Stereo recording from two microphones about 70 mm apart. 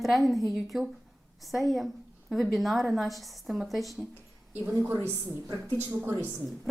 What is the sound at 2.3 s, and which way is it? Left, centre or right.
A woman's voice, centre.